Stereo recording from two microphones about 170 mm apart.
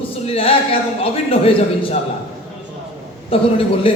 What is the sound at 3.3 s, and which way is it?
Speech, 35° left (ahead or behind).